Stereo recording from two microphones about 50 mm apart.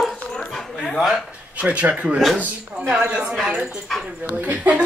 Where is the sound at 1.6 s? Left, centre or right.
Right.